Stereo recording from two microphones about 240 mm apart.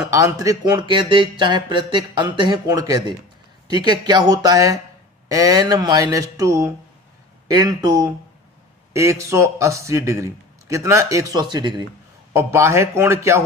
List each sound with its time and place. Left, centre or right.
0.1 s a man's voice: centre